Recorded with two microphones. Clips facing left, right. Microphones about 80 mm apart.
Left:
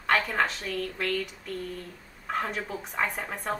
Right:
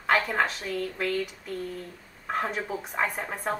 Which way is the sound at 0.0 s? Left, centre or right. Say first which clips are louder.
Right 1 dB; centre.